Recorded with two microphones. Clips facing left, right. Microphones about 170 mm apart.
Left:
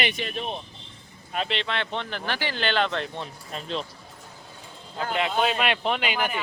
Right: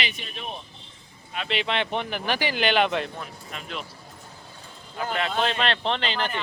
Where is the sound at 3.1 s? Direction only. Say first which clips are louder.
Left 2 dB; 30° left (ahead or behind).